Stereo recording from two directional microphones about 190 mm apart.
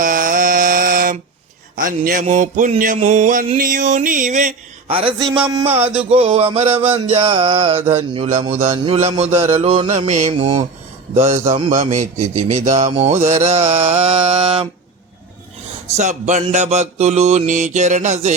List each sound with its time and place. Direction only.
0.0 s mantra: 45° right (ahead or behind); by 5.1 s 30° right (ahead or behind)
5.2 s a sound: 5° right (ahead or behind)
5.6 s mantra: 30° right (ahead or behind)
16.0 s mantra: 40° right (ahead or behind)